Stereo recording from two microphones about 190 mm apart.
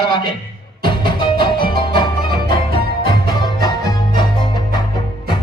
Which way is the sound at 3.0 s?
20° left (ahead or behind).